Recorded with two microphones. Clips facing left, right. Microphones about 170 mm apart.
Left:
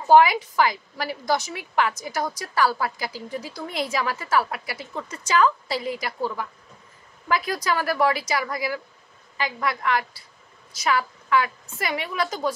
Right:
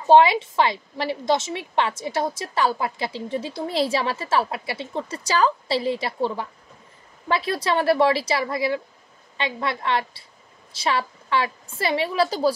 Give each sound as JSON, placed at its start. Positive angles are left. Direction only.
{"t": 0.0, "sound": "a woman's voice", "side_deg": -25}